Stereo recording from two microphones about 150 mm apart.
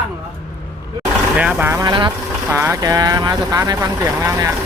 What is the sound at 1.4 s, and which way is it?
Speech, 10° right (ahead or behind).